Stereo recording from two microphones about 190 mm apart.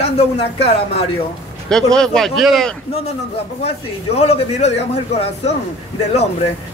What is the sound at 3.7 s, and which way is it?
A man's voice, 35° left (ahead or behind).